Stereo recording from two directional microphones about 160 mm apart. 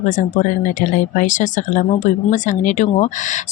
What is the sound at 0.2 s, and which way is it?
Speech, 55° left (ahead or behind).